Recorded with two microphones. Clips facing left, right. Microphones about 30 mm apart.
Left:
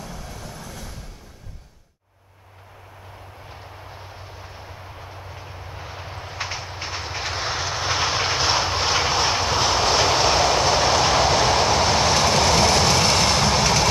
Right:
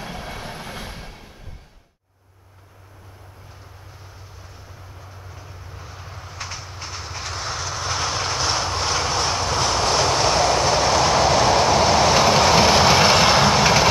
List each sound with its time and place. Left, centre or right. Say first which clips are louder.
0.0 s train: right 4 dB; right
3.9 s vehicle: left 5 dB; left; by 13.8 s centre